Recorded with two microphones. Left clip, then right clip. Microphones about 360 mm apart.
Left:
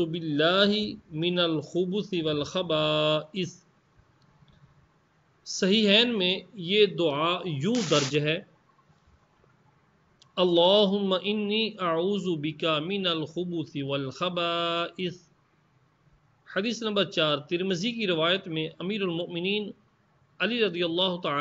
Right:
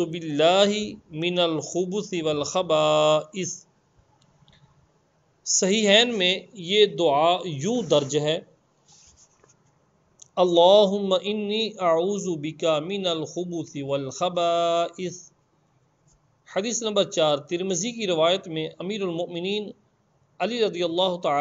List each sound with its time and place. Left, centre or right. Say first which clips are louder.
0.0 s speech: right 4 dB; centre
5.4 s speech: right 3 dB; centre
10.1 s speech: right 4 dB; centre
16.4 s speech: right 3 dB; centre